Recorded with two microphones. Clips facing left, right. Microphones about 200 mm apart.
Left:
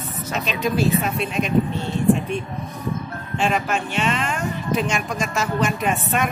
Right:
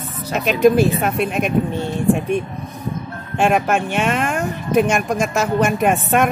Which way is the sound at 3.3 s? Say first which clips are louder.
Right 6 dB; 55° right (ahead or behind).